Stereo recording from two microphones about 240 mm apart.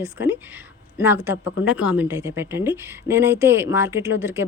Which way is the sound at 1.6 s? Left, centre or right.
Centre.